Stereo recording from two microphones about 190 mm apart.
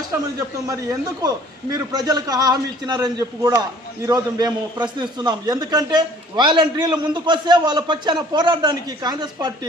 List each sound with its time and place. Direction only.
0.7 s a man's voice: 20° right (ahead or behind)